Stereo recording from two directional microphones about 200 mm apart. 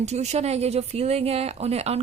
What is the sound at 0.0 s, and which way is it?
Speech, 35° right (ahead or behind).